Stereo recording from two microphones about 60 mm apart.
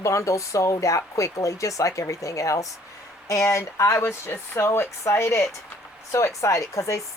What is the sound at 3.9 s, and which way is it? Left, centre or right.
Speech, left.